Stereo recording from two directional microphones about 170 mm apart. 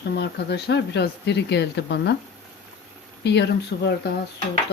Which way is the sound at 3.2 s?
85° left.